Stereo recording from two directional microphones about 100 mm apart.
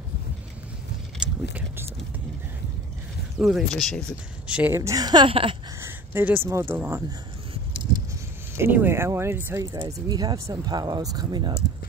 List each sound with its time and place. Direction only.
1.2 s a sound: 10° right (ahead or behind)
3.3 s speech: 10° right (ahead or behind)
3.6 s speech: 5° left (ahead or behind)
4.5 s speech: 10° right (ahead or behind)
4.7 s a woman's voice: 35° right (ahead or behind)
5.3 s speech: 65° right (ahead or behind)
5.8 s a sound: 25° right (ahead or behind)
6.5 s speech: 25° right (ahead or behind)
8.5 s speech: 20° right (ahead or behind)
9.8 s a woman's voice: 40° right (ahead or behind)